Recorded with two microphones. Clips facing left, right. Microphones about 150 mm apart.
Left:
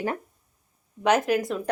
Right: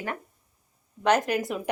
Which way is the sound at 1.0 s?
5° left (ahead or behind).